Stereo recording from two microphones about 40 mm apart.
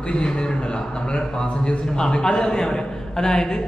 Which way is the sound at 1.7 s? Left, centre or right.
Centre.